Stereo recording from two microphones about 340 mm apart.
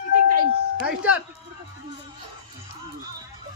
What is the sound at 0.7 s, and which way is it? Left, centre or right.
Speech, centre.